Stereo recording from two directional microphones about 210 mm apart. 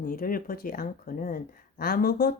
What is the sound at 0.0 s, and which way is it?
Speech, 45° left (ahead or behind).